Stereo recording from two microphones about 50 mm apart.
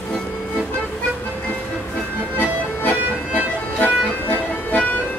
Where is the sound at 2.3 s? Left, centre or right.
Left.